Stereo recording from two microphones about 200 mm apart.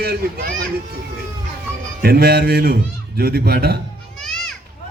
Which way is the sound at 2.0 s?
50° right (ahead or behind).